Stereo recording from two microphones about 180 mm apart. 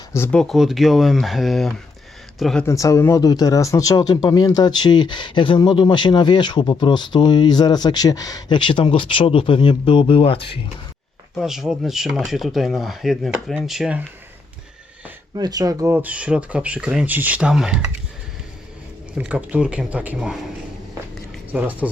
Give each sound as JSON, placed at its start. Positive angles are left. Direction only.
{"t": 0.1, "sound": "speech", "side_deg": 10}
{"t": 2.6, "sound": "speech", "side_deg": 15}
{"t": 11.3, "sound": "speech", "side_deg": 0}
{"t": 15.4, "sound": "speech", "side_deg": -20}
{"t": 19.1, "sound": "speech", "side_deg": -5}
{"t": 21.5, "sound": "speech", "side_deg": -10}